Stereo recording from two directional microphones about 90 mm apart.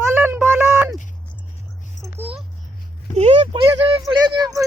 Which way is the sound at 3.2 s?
80° right.